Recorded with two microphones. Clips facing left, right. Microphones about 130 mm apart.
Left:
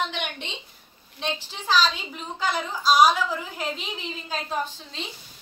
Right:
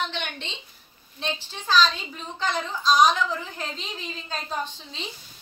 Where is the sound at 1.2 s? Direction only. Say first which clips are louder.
Left 1 dB; 15° left (ahead or behind).